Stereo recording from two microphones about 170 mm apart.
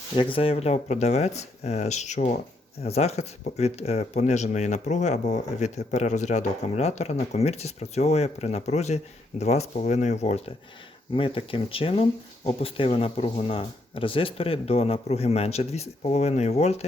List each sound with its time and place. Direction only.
0.2 s speech: 30° left (ahead or behind)